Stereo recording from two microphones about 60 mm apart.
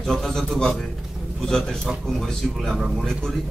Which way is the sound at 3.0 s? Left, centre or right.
Centre.